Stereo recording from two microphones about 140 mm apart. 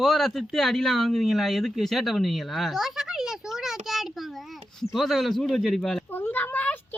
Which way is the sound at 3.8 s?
Centre (ahead or behind).